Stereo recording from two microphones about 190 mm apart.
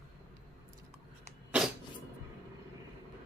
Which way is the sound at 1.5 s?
5° right (ahead or behind).